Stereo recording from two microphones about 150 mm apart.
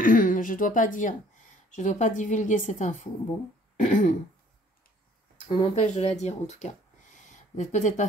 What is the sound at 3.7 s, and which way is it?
Throat clearing, 60° left (ahead or behind).